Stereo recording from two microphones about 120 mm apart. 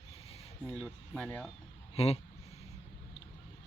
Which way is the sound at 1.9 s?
60° left (ahead or behind).